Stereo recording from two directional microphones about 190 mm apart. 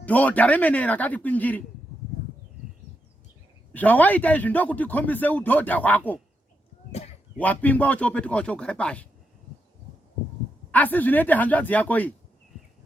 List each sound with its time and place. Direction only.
0.0 s a man's voice: 10° left (ahead or behind)
3.7 s a man's voice: 10° left (ahead or behind)
7.3 s a man's voice: 10° left (ahead or behind)
10.7 s a man's voice: 10° left (ahead or behind)